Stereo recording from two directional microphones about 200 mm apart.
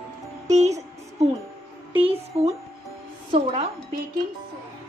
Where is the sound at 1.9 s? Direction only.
30° right (ahead or behind).